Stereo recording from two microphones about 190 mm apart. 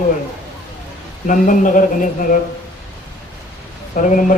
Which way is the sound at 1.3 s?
45° left (ahead or behind).